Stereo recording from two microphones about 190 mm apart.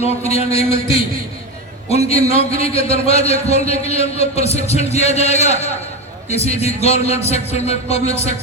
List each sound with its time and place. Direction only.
0.0 s a man's voice: 35° left (ahead or behind)
1.9 s a man's voice: 35° left (ahead or behind)